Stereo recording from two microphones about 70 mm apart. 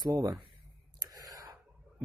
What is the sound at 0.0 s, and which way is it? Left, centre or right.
Speech, right.